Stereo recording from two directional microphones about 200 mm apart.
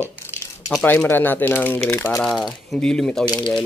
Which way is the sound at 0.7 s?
5° left (ahead or behind).